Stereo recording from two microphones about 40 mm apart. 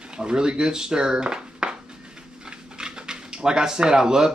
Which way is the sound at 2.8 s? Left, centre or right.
Centre.